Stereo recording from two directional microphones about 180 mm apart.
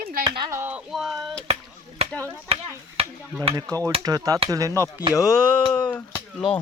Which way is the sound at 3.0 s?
35° right (ahead or behind).